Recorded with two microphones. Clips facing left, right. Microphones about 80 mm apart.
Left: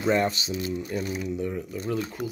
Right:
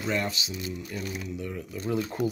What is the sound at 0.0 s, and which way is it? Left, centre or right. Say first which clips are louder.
Speech: left 6 dB; left.